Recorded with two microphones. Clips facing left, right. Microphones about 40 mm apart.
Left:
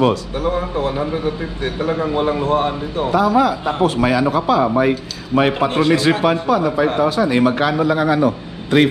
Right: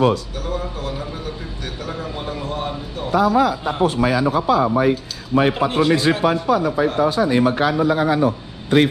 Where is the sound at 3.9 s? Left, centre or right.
Left.